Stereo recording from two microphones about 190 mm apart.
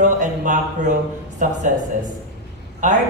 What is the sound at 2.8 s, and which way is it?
Speech, 40° right (ahead or behind).